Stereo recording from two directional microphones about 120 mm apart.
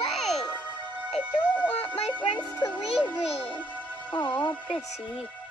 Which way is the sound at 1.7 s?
55° left (ahead or behind).